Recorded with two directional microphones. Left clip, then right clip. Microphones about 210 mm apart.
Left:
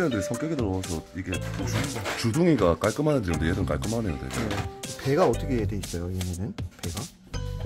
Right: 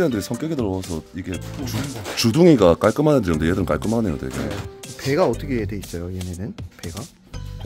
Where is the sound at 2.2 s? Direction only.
65° right (ahead or behind).